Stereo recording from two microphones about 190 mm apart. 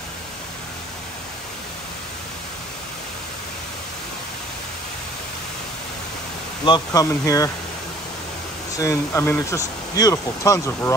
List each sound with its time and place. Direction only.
6.6 s speech: 20° left (ahead or behind)
8.7 s speech: 15° left (ahead or behind)